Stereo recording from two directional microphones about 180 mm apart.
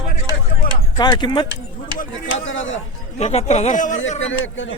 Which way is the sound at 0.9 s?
20° left (ahead or behind).